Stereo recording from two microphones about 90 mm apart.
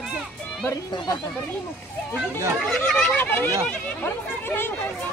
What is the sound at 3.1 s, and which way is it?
Speech, 20° left (ahead or behind).